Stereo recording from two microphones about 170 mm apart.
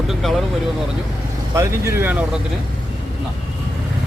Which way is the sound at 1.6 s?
15° right (ahead or behind).